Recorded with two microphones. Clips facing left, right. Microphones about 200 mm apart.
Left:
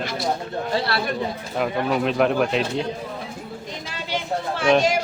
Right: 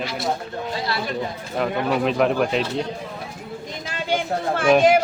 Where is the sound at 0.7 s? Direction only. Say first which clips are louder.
Left 4 dB; 65° left (ahead or behind).